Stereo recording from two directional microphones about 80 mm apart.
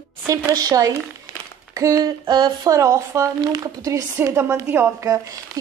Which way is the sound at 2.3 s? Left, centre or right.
Right.